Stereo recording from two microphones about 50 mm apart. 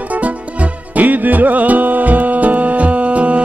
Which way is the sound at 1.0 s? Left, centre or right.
Right.